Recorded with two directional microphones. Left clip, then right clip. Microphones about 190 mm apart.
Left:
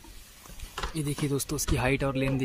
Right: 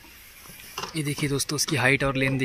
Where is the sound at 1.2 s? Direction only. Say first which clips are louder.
Right 5 dB; centre (ahead or behind).